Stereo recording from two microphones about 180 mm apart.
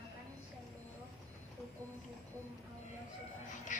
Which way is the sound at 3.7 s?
45° left (ahead or behind).